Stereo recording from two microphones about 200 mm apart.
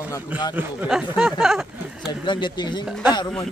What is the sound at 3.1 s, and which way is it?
Speech, 20° left (ahead or behind).